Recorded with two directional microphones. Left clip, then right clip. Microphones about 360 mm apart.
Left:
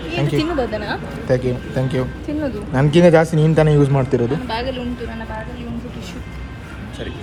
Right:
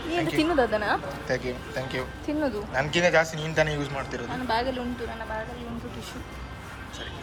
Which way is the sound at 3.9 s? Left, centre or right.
Centre.